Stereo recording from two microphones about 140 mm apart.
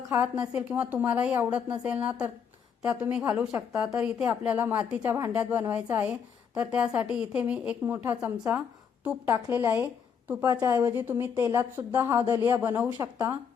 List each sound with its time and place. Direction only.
0.1 s a woman's voice: 10° right (ahead or behind)